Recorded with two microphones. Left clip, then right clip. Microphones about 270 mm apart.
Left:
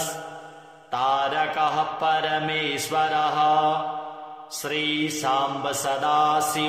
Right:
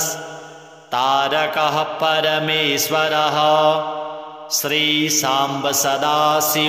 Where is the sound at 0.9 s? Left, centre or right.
Right.